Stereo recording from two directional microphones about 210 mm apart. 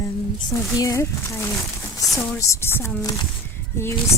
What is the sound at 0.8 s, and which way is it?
A woman's voice, 15° left (ahead or behind).